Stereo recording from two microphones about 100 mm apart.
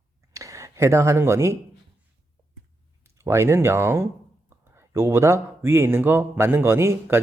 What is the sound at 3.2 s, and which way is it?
Speech, 25° right (ahead or behind).